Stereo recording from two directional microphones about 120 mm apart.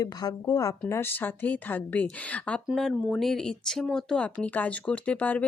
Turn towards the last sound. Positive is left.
turn(degrees=10)  # may be behind; listen again after turning